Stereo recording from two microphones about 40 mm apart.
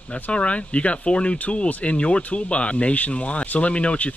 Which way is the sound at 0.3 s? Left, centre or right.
Left.